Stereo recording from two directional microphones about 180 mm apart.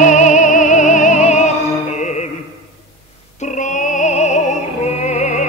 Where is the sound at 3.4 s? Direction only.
45° left (ahead or behind).